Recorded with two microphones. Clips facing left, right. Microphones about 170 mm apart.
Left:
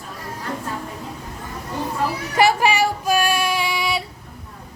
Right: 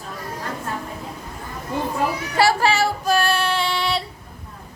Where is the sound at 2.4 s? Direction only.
15° left (ahead or behind).